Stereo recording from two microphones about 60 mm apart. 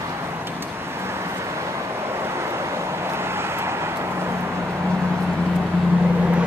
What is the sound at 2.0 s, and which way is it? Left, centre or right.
Vehicle, right.